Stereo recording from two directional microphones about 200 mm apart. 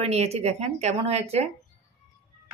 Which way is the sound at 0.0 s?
30° right (ahead or behind).